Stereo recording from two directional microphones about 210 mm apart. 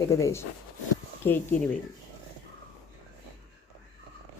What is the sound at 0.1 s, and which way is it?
A woman's voice, 15° left (ahead or behind).